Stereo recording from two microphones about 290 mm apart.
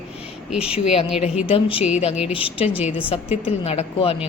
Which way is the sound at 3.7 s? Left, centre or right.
Left.